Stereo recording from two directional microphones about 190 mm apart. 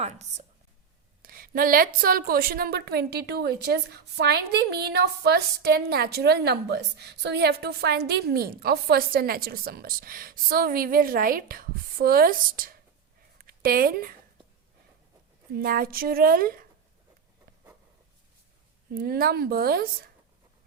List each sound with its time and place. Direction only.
0.0 s a woman's voice: 35° right (ahead or behind)
1.2 s a woman's voice: 50° right (ahead or behind)
15.5 s a woman's voice: 50° right (ahead or behind)
18.9 s a woman's voice: 50° right (ahead or behind)